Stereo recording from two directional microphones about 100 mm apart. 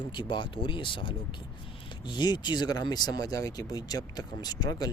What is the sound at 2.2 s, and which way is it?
Speech, 45° left (ahead or behind).